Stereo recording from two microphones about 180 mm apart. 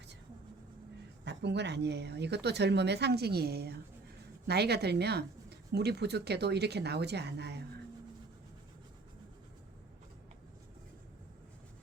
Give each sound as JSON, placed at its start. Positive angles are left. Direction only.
{"t": 1.2, "sound": "speech", "side_deg": -70}